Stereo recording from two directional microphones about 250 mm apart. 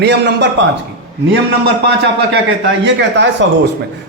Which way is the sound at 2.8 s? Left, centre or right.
Right.